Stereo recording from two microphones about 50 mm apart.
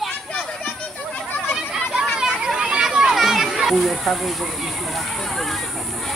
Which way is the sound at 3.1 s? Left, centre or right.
Centre.